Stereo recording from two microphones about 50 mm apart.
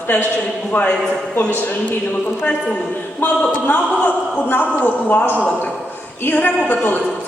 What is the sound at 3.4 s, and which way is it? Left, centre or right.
A man's voice, left.